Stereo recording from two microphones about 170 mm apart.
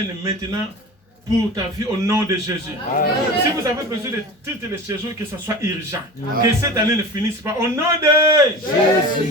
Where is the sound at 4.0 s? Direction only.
15° right (ahead or behind).